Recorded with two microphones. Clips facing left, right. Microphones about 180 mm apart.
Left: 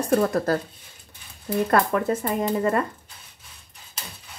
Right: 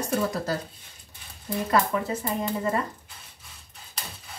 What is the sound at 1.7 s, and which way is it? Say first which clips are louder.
Speech: left 2 dB; 55° left (ahead or behind).